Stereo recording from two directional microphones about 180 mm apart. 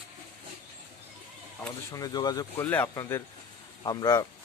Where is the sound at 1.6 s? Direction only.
20° left (ahead or behind).